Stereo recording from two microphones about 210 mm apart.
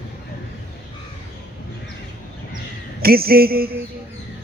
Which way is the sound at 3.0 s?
45° right (ahead or behind).